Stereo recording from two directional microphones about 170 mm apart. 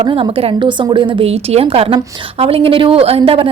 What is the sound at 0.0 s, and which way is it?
A woman's voice, 30° right (ahead or behind).